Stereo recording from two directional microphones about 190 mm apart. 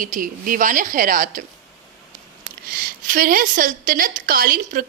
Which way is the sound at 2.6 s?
50° right (ahead or behind).